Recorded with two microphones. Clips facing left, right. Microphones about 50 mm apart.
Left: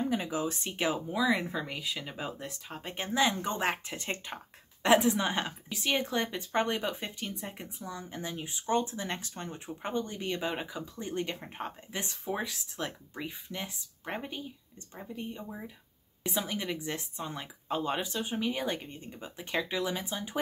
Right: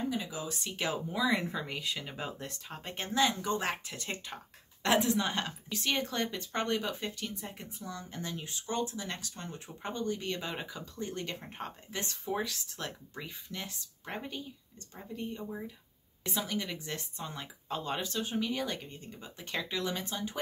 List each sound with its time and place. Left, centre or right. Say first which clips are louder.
0.1 s speech: left 5 dB; left
1.1 s a woman's voice: right 1 dB; centre